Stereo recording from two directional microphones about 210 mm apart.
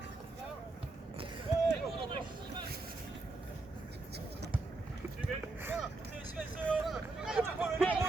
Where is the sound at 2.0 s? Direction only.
20° right (ahead or behind).